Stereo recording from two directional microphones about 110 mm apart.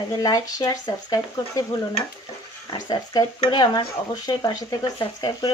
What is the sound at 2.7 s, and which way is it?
Speech, 35° left (ahead or behind).